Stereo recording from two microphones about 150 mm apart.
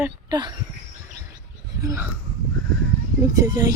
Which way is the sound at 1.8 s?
20° right (ahead or behind).